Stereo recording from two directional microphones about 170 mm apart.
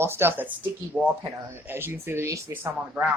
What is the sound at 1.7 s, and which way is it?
Speech, 15° right (ahead or behind).